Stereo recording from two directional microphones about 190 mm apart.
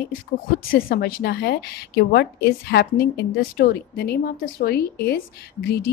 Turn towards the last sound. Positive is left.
turn(degrees=55)  # may be behind; listen again after turning